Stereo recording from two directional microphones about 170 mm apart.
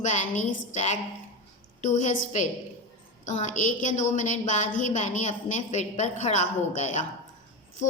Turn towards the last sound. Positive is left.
turn(degrees=45)  # may be behind; listen again after turning